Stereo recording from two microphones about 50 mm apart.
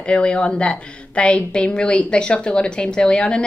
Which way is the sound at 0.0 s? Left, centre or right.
Left.